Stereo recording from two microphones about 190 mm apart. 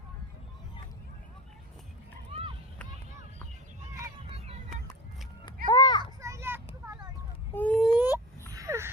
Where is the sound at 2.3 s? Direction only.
30° right (ahead or behind).